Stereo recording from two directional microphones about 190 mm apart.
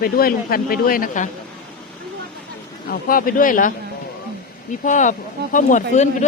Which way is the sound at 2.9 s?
45° left (ahead or behind).